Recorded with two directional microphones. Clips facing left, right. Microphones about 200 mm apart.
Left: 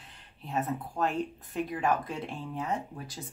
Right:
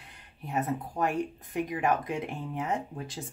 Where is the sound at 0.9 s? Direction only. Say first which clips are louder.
Even; 15° right (ahead or behind).